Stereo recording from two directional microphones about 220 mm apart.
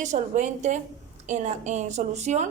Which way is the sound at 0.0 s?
35° right (ahead or behind).